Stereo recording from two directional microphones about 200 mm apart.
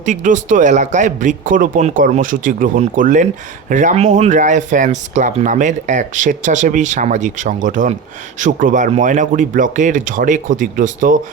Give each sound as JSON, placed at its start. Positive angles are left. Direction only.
{"t": 0.0, "sound": "speech", "side_deg": -40}